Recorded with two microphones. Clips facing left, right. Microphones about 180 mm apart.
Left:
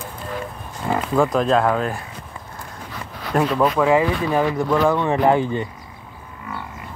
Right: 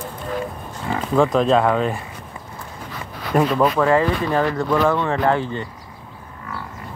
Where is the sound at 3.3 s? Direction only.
Centre (ahead or behind).